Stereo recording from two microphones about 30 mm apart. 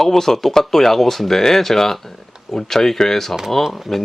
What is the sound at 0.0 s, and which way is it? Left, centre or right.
Speech, centre.